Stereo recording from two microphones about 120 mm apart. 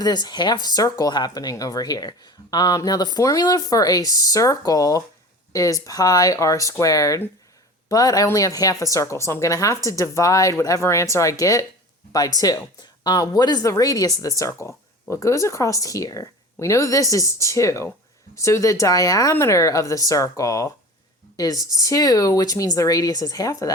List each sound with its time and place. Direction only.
0.0 s a woman's voice: 35° left (ahead or behind)